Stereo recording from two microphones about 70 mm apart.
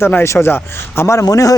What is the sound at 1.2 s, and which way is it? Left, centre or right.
Speech, left.